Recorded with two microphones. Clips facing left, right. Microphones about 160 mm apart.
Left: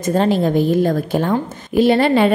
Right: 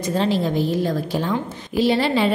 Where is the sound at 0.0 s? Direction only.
50° left (ahead or behind).